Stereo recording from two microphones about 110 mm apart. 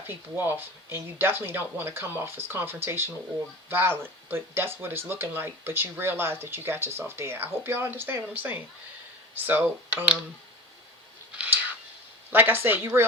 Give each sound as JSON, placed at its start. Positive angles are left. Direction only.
{"t": 0.0, "sound": "speech", "side_deg": -20}
{"t": 11.3, "sound": "a sound", "side_deg": -15}
{"t": 12.3, "sound": "speech", "side_deg": -20}